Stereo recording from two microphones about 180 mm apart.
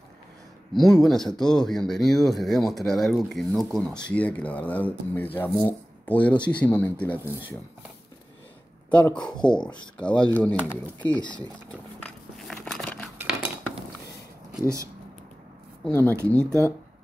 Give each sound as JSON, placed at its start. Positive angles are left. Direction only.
{"t": 0.7, "sound": "speech", "side_deg": 0}
{"t": 7.2, "sound": "speech", "side_deg": -10}
{"t": 8.9, "sound": "speech", "side_deg": 5}
{"t": 11.1, "sound": "speech", "side_deg": 25}
{"t": 12.0, "sound": "walk", "side_deg": 0}
{"t": 12.6, "sound": "crumpling", "side_deg": 5}
{"t": 13.2, "sound": "cutlery", "side_deg": -10}
{"t": 15.9, "sound": "speech", "side_deg": 10}